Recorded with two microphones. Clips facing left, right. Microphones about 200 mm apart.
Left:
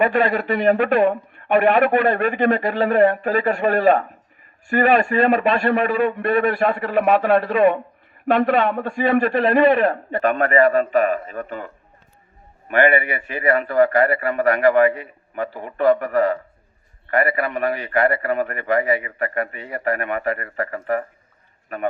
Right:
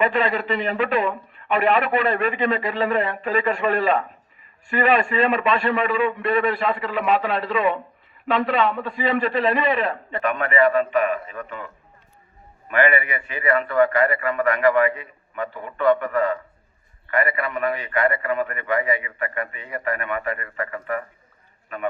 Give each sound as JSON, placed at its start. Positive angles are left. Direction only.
{"t": 0.0, "sound": "a man's voice", "side_deg": 45}